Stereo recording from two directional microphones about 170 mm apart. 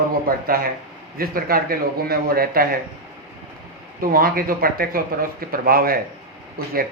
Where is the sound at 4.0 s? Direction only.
60° right (ahead or behind).